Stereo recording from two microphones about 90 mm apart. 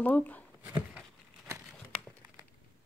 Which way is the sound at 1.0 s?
30° right (ahead or behind).